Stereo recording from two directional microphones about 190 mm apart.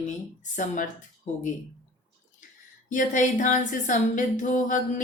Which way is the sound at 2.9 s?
45° left (ahead or behind).